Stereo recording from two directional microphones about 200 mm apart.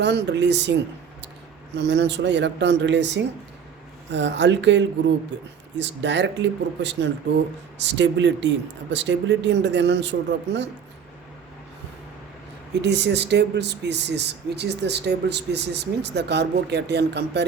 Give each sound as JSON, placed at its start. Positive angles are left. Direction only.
{"t": 0.0, "sound": "speech", "side_deg": -60}
{"t": 12.8, "sound": "speech", "side_deg": -60}